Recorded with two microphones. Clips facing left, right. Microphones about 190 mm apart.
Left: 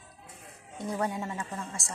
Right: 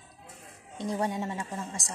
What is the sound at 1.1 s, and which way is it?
Speech, 20° right (ahead or behind).